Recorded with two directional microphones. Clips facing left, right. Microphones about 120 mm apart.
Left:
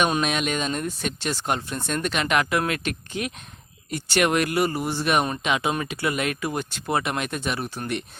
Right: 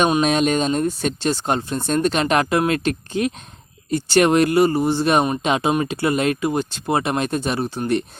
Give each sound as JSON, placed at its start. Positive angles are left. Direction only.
{"t": 0.2, "sound": "speech", "side_deg": -35}